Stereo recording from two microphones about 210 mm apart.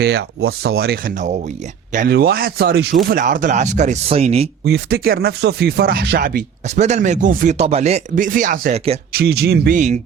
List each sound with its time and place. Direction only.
0.0 s speech: 50° right (ahead or behind); by 4.4 s 30° right (ahead or behind)
4.6 s speech: 50° right (ahead or behind)